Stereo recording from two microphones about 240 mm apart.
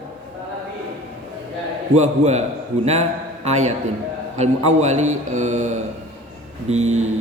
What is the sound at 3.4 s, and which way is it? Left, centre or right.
A man's voice, right.